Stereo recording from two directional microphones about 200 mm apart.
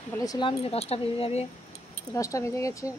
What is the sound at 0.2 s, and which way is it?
Speech, 20° left (ahead or behind).